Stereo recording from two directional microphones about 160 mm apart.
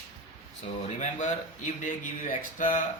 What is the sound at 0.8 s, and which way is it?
A man's voice, 45° left (ahead or behind).